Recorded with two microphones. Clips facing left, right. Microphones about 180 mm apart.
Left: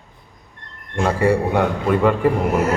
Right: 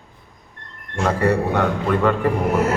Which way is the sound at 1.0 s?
10° left (ahead or behind).